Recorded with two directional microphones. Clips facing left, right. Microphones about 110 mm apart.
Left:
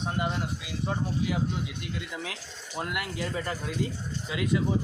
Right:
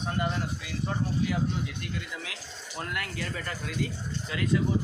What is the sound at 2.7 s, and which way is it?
Speech, 15° left (ahead or behind).